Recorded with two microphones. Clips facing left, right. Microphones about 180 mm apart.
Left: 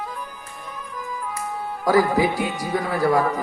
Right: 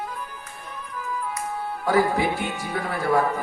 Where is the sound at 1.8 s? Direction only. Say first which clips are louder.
Left 3 dB; 40° left (ahead or behind).